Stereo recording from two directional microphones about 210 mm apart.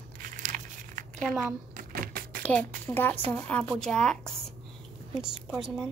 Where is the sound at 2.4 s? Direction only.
5° left (ahead or behind).